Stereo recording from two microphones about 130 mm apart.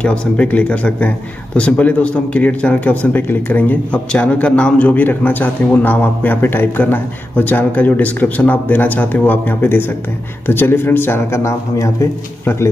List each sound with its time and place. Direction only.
0.0 s speech: 10° left (ahead or behind)